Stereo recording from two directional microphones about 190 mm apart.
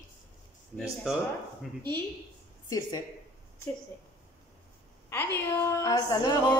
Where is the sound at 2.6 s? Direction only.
20° left (ahead or behind).